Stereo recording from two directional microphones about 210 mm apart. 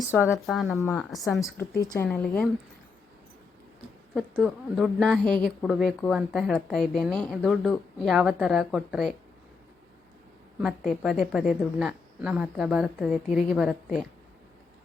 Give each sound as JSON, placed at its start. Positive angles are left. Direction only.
{"t": 0.1, "sound": "a woman's voice", "side_deg": 10}
{"t": 0.5, "sound": "a woman's voice", "side_deg": 0}
{"t": 0.8, "sound": "a woman's voice", "side_deg": 15}
{"t": 1.1, "sound": "a woman's voice", "side_deg": 0}
{"t": 1.8, "sound": "a woman's voice", "side_deg": 15}
{"t": 2.0, "sound": "a woman's voice", "side_deg": 5}
{"t": 4.1, "sound": "a woman's voice", "side_deg": 5}
{"t": 10.6, "sound": "a woman's voice", "side_deg": 0}